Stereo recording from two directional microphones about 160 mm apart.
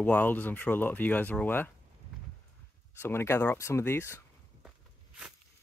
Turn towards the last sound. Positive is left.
turn(degrees=15)  # may be behind; listen again after turning